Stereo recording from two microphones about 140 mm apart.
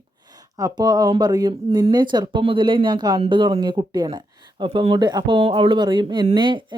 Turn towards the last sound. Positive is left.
turn(degrees=-35)  # may be behind; listen again after turning